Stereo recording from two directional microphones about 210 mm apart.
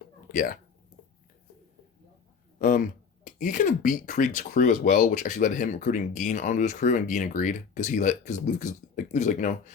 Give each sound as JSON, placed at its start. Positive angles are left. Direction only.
{"t": 0.3, "sound": "speech", "side_deg": 40}
{"t": 2.6, "sound": "speech", "side_deg": 40}